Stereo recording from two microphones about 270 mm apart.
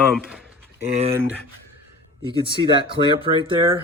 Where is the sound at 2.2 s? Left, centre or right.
Centre.